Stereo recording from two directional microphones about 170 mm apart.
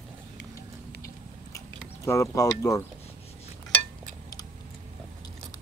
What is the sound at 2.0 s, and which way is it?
Speech, 20° left (ahead or behind).